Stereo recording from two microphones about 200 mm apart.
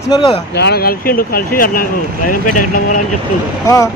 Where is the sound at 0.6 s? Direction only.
55° left (ahead or behind).